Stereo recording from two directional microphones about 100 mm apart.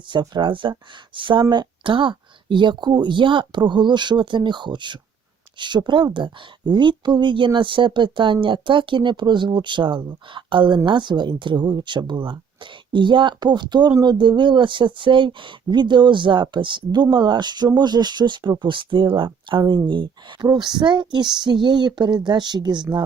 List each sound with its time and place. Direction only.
0.1 s speech: 50° right (ahead or behind)